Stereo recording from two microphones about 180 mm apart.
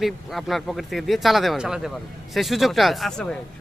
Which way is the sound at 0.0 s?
Centre (ahead or behind).